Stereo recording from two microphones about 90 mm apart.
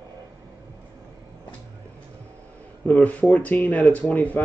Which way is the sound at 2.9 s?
15° left (ahead or behind).